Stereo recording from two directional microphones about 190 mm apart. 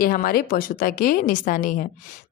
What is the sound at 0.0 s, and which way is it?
A woman's voice, 50° left (ahead or behind).